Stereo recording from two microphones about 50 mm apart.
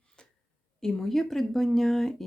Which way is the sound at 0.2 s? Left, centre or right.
Centre.